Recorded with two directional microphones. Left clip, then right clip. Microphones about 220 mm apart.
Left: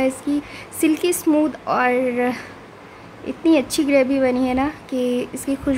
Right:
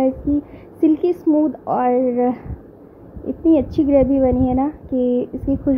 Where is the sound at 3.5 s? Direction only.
Centre (ahead or behind).